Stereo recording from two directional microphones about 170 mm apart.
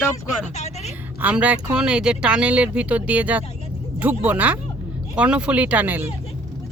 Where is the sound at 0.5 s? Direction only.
40° left (ahead or behind).